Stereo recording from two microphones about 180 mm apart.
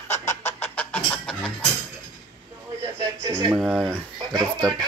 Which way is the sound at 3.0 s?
20° right (ahead or behind).